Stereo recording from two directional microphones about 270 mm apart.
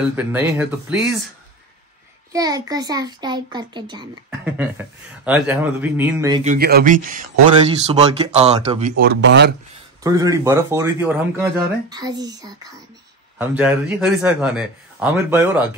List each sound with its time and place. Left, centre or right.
0.1 s speech: centre
2.3 s speech: centre
4.6 s a man's voice: centre
6.4 s speech: right
10.0 s a man's voice: centre